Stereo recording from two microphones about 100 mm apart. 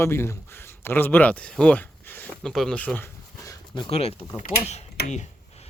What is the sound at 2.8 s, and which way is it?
Speech, 15° left (ahead or behind).